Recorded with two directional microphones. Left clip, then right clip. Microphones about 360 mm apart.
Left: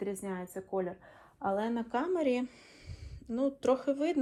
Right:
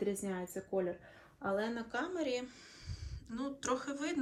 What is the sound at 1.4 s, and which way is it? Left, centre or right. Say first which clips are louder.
Speech: left 4 dB; centre.